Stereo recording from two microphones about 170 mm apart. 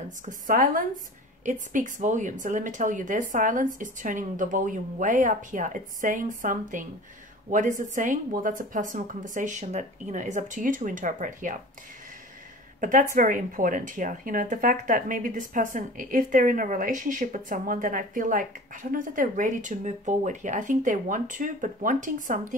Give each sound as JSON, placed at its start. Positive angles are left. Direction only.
{"t": 0.2, "sound": "a woman's voice", "side_deg": -50}
{"t": 12.8, "sound": "a woman's voice", "side_deg": -50}